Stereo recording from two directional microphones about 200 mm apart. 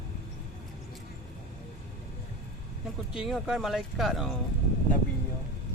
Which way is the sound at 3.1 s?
5° right (ahead or behind).